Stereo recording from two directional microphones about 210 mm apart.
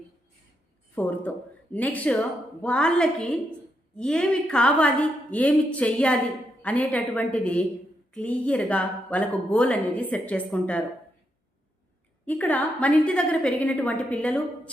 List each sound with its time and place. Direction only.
0.9 s a woman's voice: 5° left (ahead or behind)
12.2 s speech: 5° left (ahead or behind)